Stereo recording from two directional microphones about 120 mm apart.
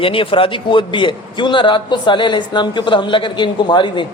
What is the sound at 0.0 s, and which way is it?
A man's voice, 50° left (ahead or behind).